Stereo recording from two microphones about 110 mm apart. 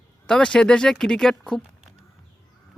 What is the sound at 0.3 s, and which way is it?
Speech, 5° left (ahead or behind).